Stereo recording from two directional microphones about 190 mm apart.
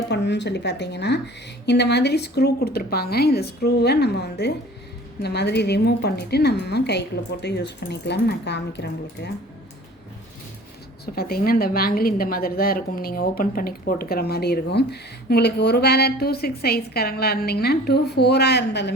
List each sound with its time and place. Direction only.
0.1 s a woman's voice: 65° left (ahead or behind)
11.0 s a woman's voice: 55° left (ahead or behind)